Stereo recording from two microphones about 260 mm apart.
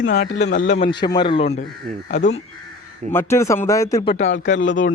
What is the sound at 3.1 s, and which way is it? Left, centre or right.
Speech, centre.